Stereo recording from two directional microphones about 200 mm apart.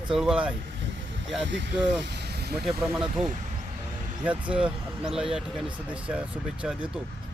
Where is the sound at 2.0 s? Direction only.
55° right (ahead or behind).